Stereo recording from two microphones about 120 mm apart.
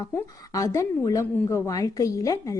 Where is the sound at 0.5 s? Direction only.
25° left (ahead or behind).